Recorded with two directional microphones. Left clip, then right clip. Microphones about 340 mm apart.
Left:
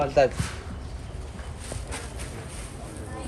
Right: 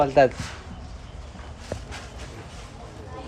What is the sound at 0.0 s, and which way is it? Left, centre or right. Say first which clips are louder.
Speech: right 3 dB; right.